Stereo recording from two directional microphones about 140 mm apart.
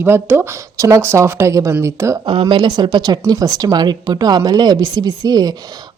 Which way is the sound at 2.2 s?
35° right (ahead or behind).